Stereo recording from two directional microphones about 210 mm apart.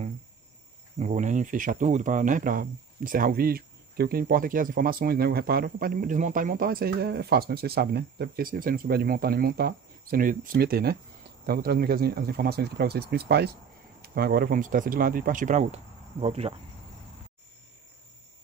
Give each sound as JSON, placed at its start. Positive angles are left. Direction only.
{"t": 0.9, "sound": "speech", "side_deg": -35}